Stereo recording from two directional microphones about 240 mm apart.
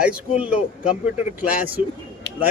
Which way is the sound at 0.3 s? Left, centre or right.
Centre.